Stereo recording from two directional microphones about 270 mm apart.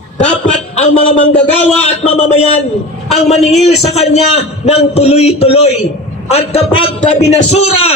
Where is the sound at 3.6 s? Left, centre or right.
Left.